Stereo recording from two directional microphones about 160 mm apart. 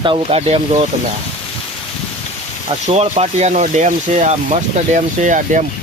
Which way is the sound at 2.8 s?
45° right (ahead or behind).